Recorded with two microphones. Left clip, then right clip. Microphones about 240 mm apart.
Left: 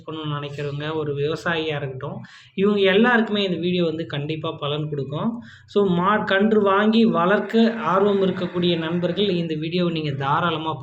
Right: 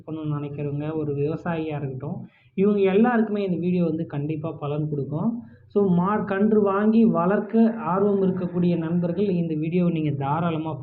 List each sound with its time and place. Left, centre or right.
0.3 s speech: centre